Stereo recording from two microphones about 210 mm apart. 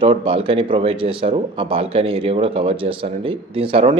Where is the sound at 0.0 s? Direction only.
25° right (ahead or behind).